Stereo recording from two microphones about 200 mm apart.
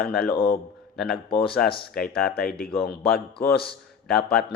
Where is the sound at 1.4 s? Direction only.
50° left (ahead or behind).